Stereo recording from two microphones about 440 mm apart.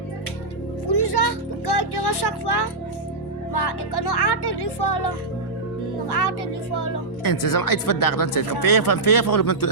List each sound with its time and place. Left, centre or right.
0.9 s a sound: left
3.5 s music: left
6.1 s speech: left